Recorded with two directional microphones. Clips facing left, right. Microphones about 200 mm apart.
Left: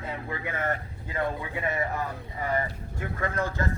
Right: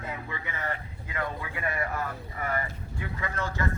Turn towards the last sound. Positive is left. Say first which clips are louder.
# left 4 dB
turn(degrees=50)  # may be behind; listen again after turning